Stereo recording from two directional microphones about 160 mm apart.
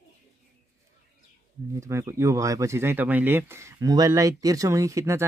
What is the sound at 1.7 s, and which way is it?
Speech, 15° right (ahead or behind).